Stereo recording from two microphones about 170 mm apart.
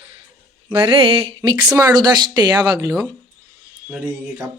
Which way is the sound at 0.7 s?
30° right (ahead or behind).